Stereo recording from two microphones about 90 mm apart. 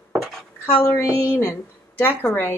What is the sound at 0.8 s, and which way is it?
A woman's voice, 25° left (ahead or behind).